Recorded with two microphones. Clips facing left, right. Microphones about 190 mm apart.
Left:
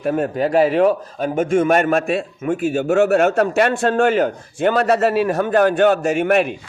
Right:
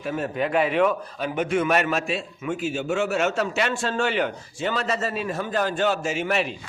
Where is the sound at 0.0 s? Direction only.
55° left (ahead or behind).